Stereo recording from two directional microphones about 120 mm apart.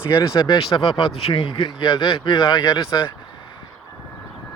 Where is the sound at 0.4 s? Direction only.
45° left (ahead or behind).